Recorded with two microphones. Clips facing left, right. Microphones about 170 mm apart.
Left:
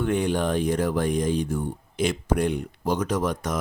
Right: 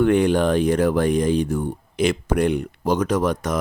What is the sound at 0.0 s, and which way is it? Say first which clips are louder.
Speech: right 7 dB; 70° right (ahead or behind).